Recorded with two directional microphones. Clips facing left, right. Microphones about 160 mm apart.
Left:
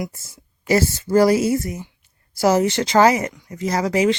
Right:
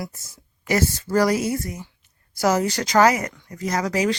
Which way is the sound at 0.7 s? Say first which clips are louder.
Left 4 dB; 25° left (ahead or behind).